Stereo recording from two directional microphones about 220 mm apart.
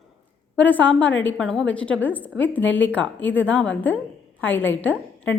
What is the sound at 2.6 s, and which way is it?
Speech, 60° left (ahead or behind).